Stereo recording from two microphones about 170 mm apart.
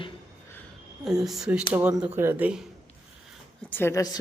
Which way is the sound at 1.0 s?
Centre (ahead or behind).